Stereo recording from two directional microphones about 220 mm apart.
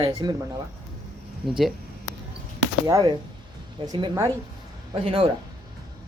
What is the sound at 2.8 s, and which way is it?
A woman's voice, 20° right (ahead or behind).